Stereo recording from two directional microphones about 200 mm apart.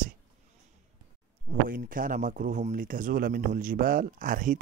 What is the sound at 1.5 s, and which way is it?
Speech, 45° right (ahead or behind).